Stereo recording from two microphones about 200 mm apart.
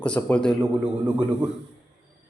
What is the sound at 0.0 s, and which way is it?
Speech, 5° left (ahead or behind).